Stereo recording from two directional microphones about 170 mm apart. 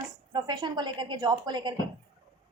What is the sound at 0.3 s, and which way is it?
A woman's voice, 25° right (ahead or behind).